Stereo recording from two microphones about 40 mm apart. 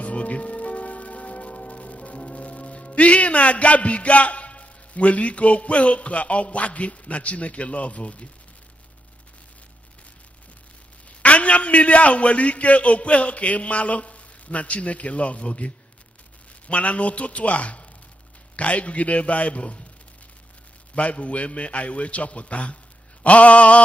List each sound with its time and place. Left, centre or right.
0.0 s church bell: left
11.1 s a man's voice: left
20.9 s a man's voice: left